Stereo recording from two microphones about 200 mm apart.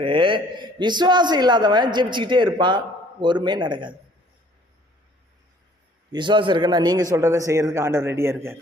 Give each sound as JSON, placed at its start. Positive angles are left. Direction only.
{"t": 0.0, "sound": "a man's voice", "side_deg": -25}
{"t": 6.1, "sound": "a man's voice", "side_deg": -25}